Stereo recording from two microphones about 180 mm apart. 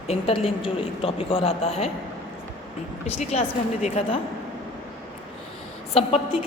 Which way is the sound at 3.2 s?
40° left (ahead or behind).